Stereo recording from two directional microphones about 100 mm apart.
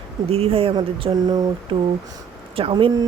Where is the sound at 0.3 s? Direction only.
85° right; by 1.1 s 70° right (ahead or behind).